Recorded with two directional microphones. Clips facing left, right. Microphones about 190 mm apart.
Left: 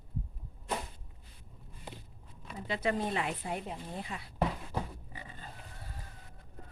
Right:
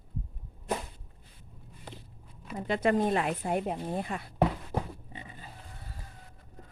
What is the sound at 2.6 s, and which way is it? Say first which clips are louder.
Speech: right 6 dB; 50° right (ahead or behind).